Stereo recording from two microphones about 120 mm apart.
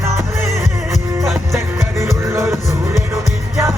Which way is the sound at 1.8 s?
25° right (ahead or behind).